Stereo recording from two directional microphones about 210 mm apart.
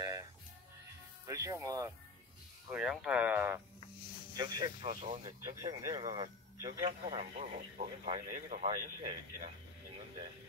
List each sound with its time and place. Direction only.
0.0 s music: 15° right (ahead or behind)
2.7 s speech: 5° right (ahead or behind)
4.4 s speech: 20° right (ahead or behind)